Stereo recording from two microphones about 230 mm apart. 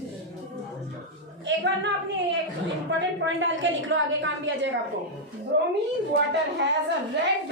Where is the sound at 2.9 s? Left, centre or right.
Right.